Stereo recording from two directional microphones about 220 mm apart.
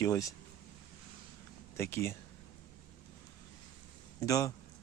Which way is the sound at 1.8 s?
10° left (ahead or behind).